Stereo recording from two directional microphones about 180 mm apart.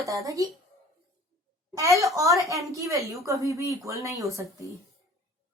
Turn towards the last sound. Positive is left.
turn(degrees=-15)  # may be behind; listen again after turning